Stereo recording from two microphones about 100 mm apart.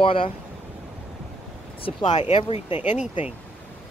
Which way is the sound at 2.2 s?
85° left.